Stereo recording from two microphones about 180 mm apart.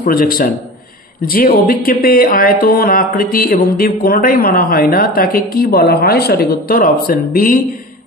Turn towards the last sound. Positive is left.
turn(degrees=55)  # may be behind; listen again after turning